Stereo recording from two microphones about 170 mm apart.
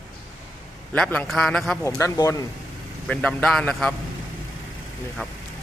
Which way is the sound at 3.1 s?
5° left (ahead or behind).